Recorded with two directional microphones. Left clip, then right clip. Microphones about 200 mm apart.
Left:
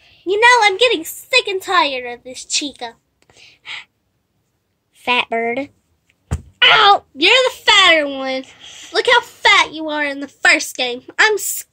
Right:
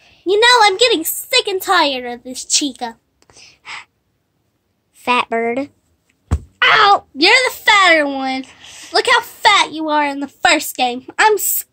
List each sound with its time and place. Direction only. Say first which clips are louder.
0.2 s a woman's voice: right 1 dB; 50° right (ahead or behind)
3.3 s a sound: right 1 dB; 15° right (ahead or behind)
5.0 s speech: right 1 dB; 10° right (ahead or behind)
7.2 s a woman's voice: right 1 dB; 50° right (ahead or behind)
8.5 s speech: even; centre (ahead or behind)
8.7 s a sound: right 3 dB; 40° right (ahead or behind)
9.4 s a woman's voice: even; 45° right (ahead or behind)